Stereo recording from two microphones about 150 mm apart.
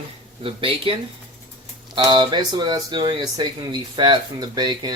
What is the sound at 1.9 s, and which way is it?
Speech, 30° right (ahead or behind).